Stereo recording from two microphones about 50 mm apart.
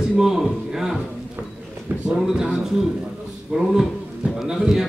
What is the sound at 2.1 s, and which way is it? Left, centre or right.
Speech, centre.